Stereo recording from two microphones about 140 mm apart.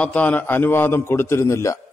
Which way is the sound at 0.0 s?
10° left (ahead or behind).